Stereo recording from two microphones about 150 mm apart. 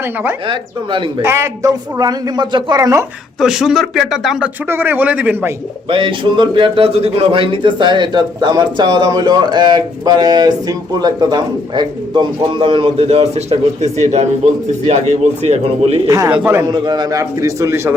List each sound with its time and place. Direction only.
0.4 s a man's voice: 35° right (ahead or behind)
1.2 s speech: 15° right (ahead or behind)
3.4 s speech: 5° right (ahead or behind)
4.7 s a man's voice: 15° right (ahead or behind)
5.9 s a man's voice: 35° right (ahead or behind)
16.0 s a man's voice: 25° right (ahead or behind)
16.6 s speech: 25° right (ahead or behind)